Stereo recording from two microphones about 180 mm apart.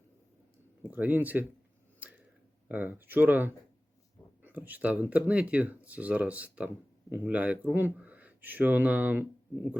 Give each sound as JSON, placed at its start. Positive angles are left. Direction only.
{"t": 0.8, "sound": "speech", "side_deg": -10}
{"t": 2.0, "sound": "a sound", "side_deg": -10}
{"t": 2.6, "sound": "speech", "side_deg": -10}